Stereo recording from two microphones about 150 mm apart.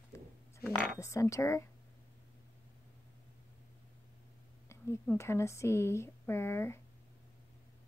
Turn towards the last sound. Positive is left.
turn(degrees=15)  # may be behind; listen again after turning